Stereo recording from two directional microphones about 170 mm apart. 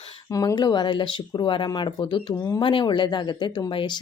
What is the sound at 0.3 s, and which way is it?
Speech, 20° left (ahead or behind).